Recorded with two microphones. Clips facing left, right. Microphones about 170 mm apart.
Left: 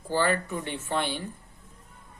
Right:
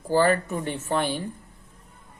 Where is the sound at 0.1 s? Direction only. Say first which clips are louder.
Right 5 dB; 45° right (ahead or behind).